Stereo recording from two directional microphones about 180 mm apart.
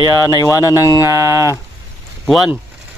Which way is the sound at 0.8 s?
15° right (ahead or behind).